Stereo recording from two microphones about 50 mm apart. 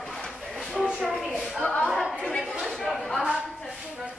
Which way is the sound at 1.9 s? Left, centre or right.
Centre.